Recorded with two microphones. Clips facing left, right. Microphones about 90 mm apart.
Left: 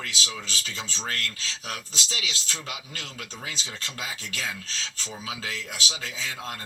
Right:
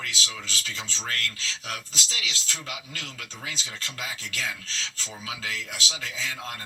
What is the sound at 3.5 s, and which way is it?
Speech, 25° left (ahead or behind).